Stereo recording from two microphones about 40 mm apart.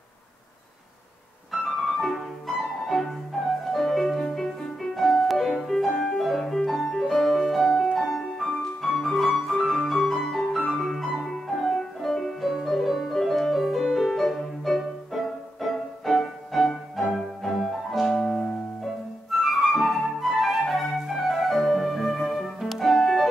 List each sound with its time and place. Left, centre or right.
1.5 s music: centre
7.2 s piano: centre
8.0 s music: centre
18.1 s music: centre
19.3 s flute: centre
21.1 s music: centre